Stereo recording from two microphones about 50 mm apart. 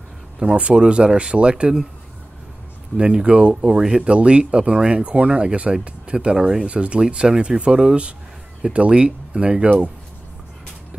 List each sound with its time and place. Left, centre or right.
0.4 s speech: right
3.0 s speech: right
3.7 s speech: centre